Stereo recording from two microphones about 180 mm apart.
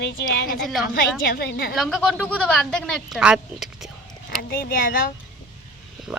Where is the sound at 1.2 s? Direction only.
55° left (ahead or behind).